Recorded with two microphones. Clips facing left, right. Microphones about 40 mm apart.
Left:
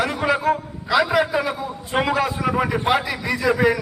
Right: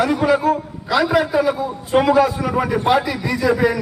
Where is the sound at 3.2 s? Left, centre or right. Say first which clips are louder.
Right 1 dB; centre.